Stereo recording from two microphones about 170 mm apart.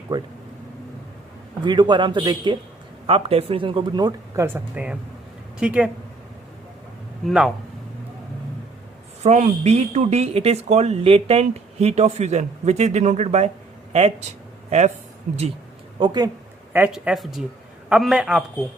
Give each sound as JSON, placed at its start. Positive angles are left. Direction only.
{"t": 0.1, "sound": "a man's voice", "side_deg": -25}
{"t": 1.6, "sound": "a man's voice", "side_deg": -25}
{"t": 4.4, "sound": "a man's voice", "side_deg": -10}
{"t": 7.3, "sound": "a man's voice", "side_deg": 0}
{"t": 9.2, "sound": "a woman's voice", "side_deg": -40}
{"t": 16.0, "sound": "a man's voice", "side_deg": -25}
{"t": 16.7, "sound": "a man's voice", "side_deg": -10}